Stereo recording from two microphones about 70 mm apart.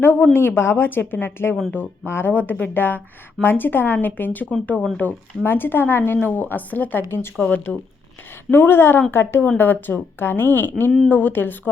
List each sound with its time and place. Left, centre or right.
0.0 s speech: left
7.4 s speech: left
8.4 s speech: left